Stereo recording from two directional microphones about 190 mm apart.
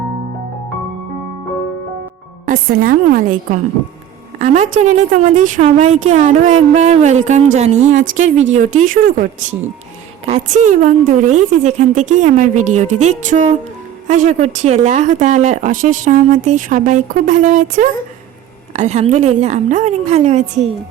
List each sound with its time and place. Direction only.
2.5 s a woman's voice: 50° right (ahead or behind)
4.4 s a woman's voice: 40° right (ahead or behind)